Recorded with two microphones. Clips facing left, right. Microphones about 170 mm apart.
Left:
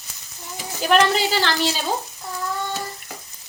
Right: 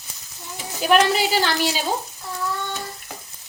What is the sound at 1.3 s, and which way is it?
Speech, 15° right (ahead or behind).